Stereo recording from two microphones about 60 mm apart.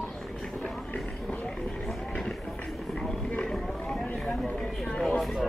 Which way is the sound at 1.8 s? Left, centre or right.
Centre.